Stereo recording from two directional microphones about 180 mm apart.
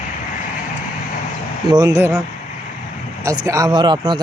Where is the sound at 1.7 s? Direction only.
20° right (ahead or behind).